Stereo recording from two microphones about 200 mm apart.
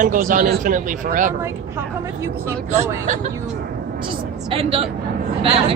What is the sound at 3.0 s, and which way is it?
Speech, 35° right (ahead or behind).